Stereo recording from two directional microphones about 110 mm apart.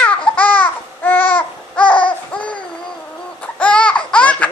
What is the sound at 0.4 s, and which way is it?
Babbling, 15° left (ahead or behind).